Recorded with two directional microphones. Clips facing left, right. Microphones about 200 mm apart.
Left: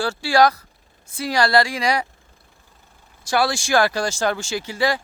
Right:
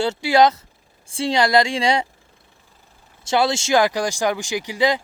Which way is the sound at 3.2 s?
20° right (ahead or behind).